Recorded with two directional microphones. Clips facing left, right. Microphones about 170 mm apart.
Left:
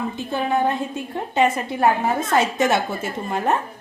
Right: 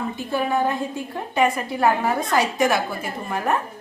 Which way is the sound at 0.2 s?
20° left (ahead or behind).